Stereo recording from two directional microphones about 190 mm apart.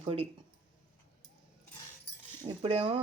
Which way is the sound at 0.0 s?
30° right (ahead or behind).